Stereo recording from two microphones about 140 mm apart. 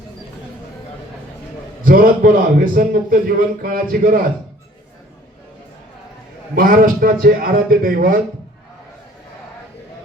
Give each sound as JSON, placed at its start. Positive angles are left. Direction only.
{"t": 1.8, "sound": "a man's voice", "side_deg": -85}
{"t": 6.6, "sound": "a man's voice", "side_deg": -85}